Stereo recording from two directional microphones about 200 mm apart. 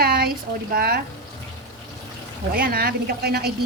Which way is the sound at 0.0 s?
50° right (ahead or behind).